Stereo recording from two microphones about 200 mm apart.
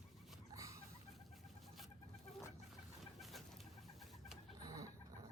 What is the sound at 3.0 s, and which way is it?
Bird, centre (ahead or behind).